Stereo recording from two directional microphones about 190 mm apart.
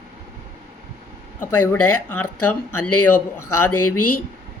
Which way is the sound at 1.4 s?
15° left (ahead or behind).